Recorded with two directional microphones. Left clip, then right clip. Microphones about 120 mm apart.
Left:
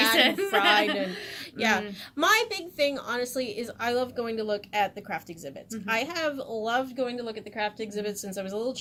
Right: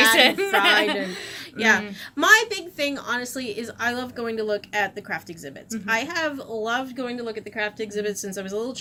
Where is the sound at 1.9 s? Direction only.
20° left (ahead or behind).